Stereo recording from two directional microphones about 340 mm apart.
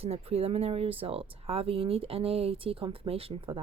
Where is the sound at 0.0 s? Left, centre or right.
Centre.